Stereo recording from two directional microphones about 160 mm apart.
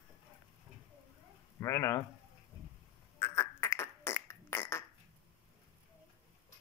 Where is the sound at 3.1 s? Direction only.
15° left (ahead or behind).